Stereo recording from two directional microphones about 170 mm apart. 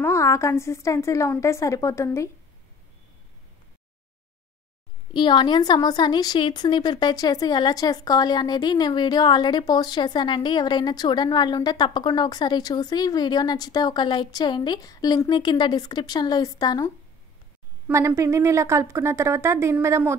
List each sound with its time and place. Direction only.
0.0 s a woman's voice: 15° left (ahead or behind)
5.1 s speech: 25° left (ahead or behind)
17.8 s a woman's voice: 15° right (ahead or behind)